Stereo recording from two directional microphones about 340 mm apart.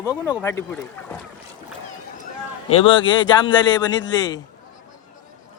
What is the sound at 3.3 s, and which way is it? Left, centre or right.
Speech, centre.